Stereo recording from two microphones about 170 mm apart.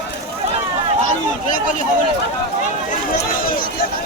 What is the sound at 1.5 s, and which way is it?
Speech, 50° left (ahead or behind).